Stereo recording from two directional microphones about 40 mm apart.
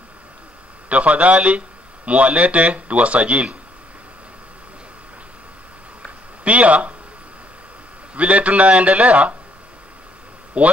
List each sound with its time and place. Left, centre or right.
0.8 s speech: right
6.4 s speech: right
8.1 s speech: right
10.6 s speech: right